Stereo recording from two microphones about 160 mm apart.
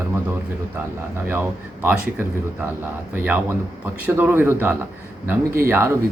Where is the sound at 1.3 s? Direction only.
15° right (ahead or behind).